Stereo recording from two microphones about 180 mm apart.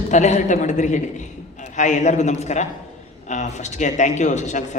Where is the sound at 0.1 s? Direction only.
40° left (ahead or behind).